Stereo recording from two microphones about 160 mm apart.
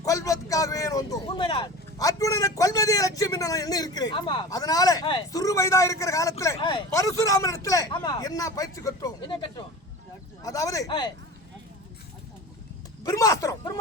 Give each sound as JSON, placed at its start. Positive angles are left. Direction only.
{"t": 0.0, "sound": "vehicle", "side_deg": 20}
{"t": 1.3, "sound": "speech", "side_deg": 30}
{"t": 6.6, "sound": "speech", "side_deg": 30}
{"t": 6.9, "sound": "speech", "side_deg": 20}
{"t": 13.0, "sound": "speech", "side_deg": 20}